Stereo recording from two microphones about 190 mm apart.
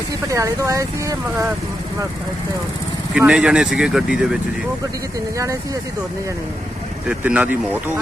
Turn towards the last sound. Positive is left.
turn(degrees=-10)  # may be behind; listen again after turning